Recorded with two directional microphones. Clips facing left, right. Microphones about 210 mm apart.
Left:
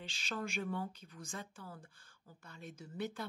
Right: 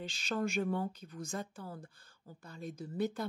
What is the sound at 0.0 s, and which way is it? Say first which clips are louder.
Speech: right 6 dB; 40° right (ahead or behind).